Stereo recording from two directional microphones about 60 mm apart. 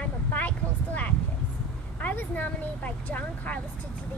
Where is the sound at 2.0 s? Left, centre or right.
Left.